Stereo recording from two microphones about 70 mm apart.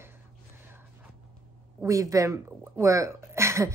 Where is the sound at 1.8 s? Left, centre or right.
Right.